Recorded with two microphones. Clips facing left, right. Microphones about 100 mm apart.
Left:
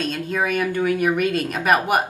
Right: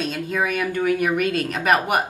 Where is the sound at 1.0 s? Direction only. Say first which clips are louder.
Left 1 dB; 15° left (ahead or behind).